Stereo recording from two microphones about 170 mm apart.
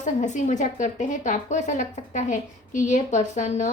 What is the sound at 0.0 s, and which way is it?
A woman's voice, 45° left (ahead or behind).